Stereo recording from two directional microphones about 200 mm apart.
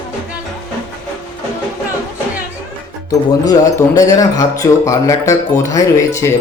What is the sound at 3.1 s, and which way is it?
Speech, 15° left (ahead or behind).